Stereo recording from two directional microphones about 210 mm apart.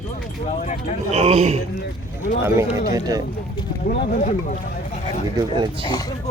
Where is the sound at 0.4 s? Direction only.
35° left (ahead or behind).